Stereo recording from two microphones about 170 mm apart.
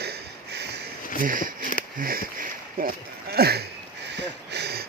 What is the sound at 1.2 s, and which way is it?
Speech, 55° right (ahead or behind).